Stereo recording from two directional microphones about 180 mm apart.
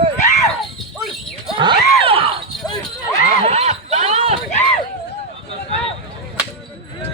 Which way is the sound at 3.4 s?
35° right (ahead or behind).